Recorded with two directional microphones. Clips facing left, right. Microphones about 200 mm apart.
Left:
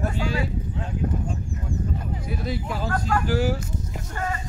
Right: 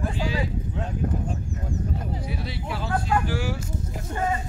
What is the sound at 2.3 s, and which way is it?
Speech, 45° left (ahead or behind).